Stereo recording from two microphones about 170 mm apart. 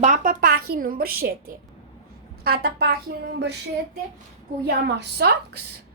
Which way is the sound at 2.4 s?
65° right (ahead or behind).